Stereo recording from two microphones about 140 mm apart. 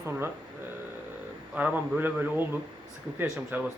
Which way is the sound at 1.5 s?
10° right (ahead or behind).